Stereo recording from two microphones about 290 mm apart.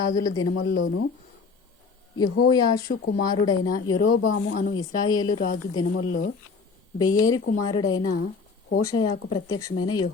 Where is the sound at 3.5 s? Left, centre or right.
Left.